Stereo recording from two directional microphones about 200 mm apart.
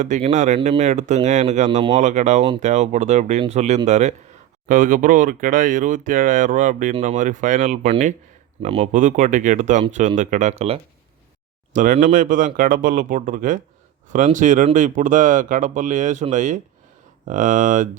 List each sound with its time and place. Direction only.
0.0 s speech: 35° right (ahead or behind)